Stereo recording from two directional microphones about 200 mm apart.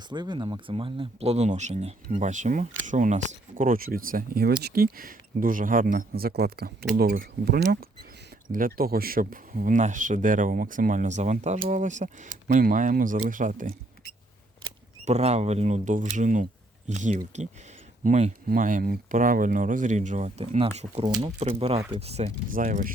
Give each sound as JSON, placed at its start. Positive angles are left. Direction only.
{"t": 0.1, "sound": "speech", "side_deg": -20}
{"t": 22.5, "sound": "speech", "side_deg": -40}